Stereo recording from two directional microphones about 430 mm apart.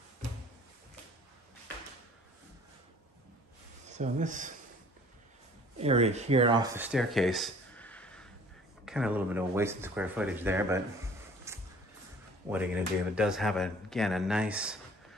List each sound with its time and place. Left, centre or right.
3.8 s speech: centre
5.8 s speech: centre
11.5 s music: centre
12.4 s speech: centre